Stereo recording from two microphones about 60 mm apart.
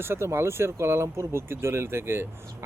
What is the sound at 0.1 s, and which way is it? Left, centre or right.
Speech, right.